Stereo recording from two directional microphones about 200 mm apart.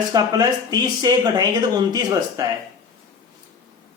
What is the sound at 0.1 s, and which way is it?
Speech, 20° right (ahead or behind).